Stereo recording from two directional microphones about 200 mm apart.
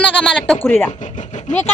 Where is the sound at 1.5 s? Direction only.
40° left (ahead or behind).